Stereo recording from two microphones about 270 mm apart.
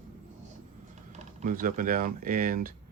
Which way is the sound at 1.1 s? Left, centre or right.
Right.